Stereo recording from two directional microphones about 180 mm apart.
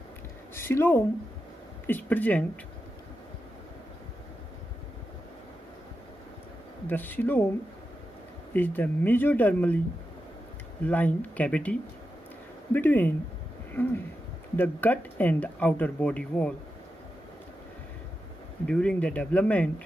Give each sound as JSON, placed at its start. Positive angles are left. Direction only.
{"t": 0.6, "sound": "speech", "side_deg": 10}
{"t": 6.9, "sound": "speech", "side_deg": 10}
{"t": 8.5, "sound": "speech", "side_deg": 10}
{"t": 10.8, "sound": "speech", "side_deg": 10}
{"t": 18.7, "sound": "speech", "side_deg": 5}